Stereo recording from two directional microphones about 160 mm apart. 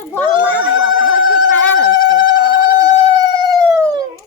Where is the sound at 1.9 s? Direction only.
30° right (ahead or behind).